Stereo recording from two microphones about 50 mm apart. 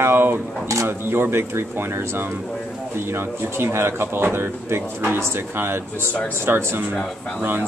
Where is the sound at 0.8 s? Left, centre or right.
Right.